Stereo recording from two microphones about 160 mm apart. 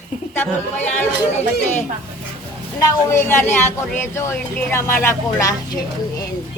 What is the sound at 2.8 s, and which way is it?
A woman's voice, 20° left (ahead or behind).